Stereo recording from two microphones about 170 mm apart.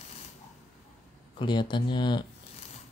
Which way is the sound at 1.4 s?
30° left (ahead or behind).